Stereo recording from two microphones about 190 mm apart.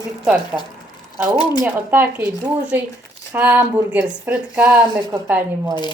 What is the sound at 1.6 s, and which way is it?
Speech, 10° right (ahead or behind).